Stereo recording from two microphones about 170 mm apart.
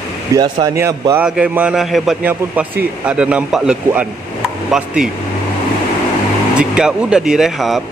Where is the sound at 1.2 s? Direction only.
5° right (ahead or behind).